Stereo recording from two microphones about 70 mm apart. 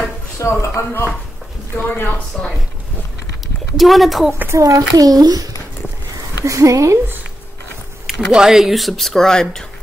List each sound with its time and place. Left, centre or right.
0.4 s speech: left
2.0 s speech: left
3.7 s speech: centre
4.5 s a child's voice: right
6.4 s speech: right
8.1 s speech: centre